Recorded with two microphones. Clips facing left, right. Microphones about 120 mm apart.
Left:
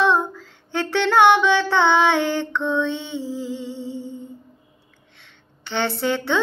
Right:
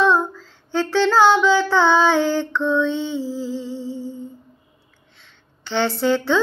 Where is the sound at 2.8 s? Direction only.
60° left (ahead or behind).